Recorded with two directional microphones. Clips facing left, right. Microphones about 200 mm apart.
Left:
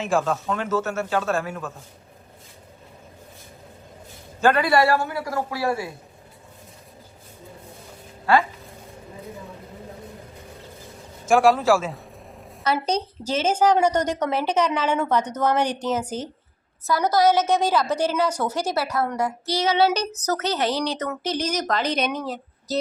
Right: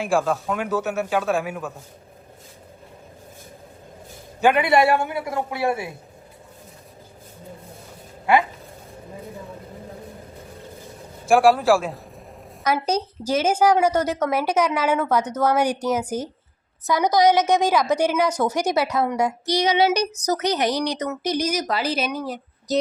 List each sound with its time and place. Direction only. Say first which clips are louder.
0.0 s speech: right 1 dB; 10° right (ahead or behind)
4.4 s a man's voice: right 1 dB; 15° right (ahead or behind)
11.3 s speech: right 1 dB; 10° right (ahead or behind)